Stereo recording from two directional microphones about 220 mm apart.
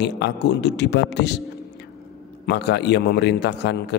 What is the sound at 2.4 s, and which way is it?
A man's voice, 50° left (ahead or behind).